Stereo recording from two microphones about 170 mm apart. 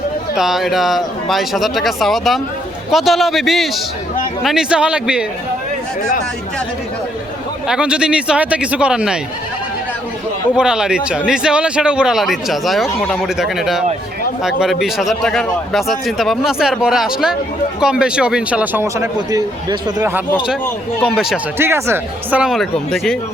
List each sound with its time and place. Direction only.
0.3 s a man's voice: centre (ahead or behind)
7.7 s a man's voice: 5° right (ahead or behind)
10.5 s a man's voice: 5° right (ahead or behind); by 20.1 s 20° right (ahead or behind)
21.6 s a man's voice: 15° right (ahead or behind); by 23.1 s centre (ahead or behind)